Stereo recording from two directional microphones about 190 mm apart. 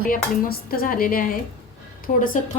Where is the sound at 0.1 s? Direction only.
50° left (ahead or behind).